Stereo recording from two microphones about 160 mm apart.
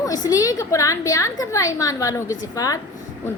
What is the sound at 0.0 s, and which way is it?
A woman's voice, 20° left (ahead or behind).